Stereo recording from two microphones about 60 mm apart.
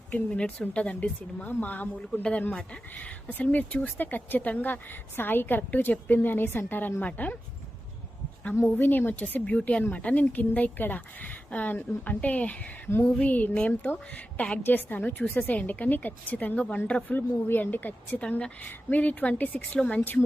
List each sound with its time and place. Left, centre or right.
0.1 s a woman's voice: centre
3.0 s a woman's voice: left
8.9 s a woman's voice: left
18.2 s a woman's voice: centre
20.0 s a woman's voice: left